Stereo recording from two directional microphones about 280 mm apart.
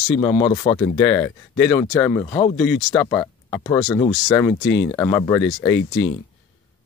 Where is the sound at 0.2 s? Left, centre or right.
Centre.